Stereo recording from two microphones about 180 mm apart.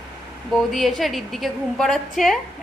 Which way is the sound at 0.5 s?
Centre (ahead or behind).